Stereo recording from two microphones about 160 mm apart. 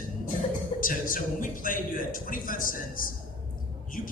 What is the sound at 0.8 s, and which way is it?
A woman's voice, 60° left (ahead or behind).